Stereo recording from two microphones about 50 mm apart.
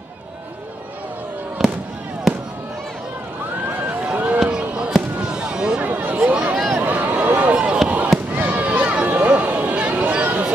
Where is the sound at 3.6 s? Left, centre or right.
Right.